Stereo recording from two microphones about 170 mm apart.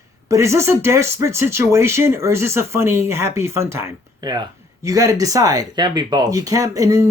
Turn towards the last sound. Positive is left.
turn(degrees=-20)  # may be behind; listen again after turning